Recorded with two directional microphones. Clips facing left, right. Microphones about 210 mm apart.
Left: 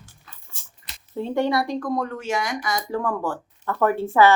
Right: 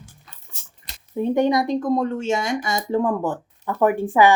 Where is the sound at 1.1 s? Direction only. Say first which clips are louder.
Right 4 dB; 15° right (ahead or behind).